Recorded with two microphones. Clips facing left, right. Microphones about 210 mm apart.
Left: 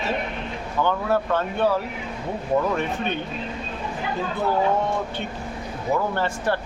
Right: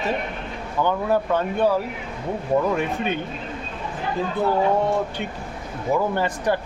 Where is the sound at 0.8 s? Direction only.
15° right (ahead or behind).